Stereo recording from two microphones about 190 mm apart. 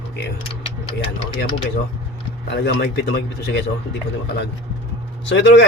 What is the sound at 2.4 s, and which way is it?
A man's voice, 65° left (ahead or behind).